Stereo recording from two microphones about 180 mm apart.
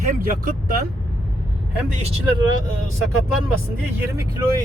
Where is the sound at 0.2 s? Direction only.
50° right (ahead or behind).